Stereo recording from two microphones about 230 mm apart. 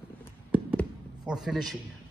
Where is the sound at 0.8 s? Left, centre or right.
Centre.